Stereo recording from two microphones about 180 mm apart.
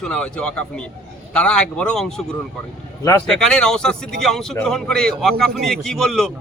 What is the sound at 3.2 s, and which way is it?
A man's voice, 5° left (ahead or behind).